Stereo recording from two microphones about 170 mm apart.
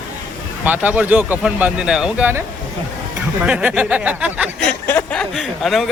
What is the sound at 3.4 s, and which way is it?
Speech, 10° right (ahead or behind).